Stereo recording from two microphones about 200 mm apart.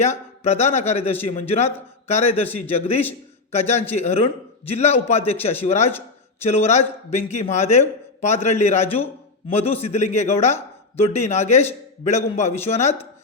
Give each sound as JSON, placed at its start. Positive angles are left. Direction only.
{"t": 0.0, "sound": "a man's voice", "side_deg": 35}